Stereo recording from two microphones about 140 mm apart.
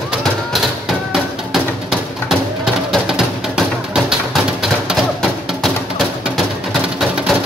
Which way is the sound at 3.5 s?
Centre (ahead or behind).